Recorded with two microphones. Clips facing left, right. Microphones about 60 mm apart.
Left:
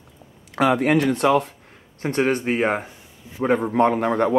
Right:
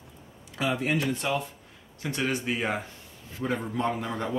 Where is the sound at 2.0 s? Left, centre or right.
Left.